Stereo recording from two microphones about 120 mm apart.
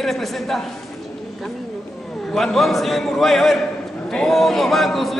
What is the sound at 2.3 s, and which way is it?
A man's voice, 5° left (ahead or behind).